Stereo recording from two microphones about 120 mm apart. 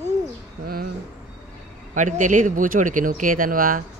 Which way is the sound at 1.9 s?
90° right.